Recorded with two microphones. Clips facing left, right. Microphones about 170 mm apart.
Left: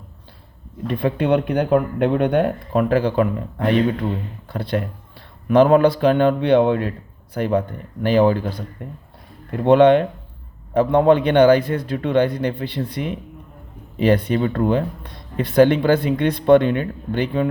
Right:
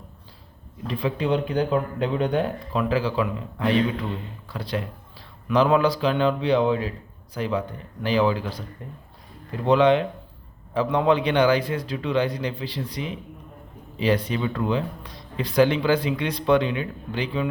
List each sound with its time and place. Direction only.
0.9 s speech: 55° left (ahead or behind)